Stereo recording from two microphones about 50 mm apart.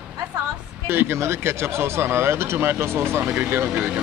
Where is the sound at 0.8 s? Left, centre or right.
Right.